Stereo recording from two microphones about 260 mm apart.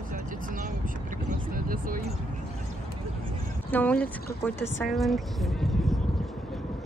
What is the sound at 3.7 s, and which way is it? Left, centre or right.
Speech, centre.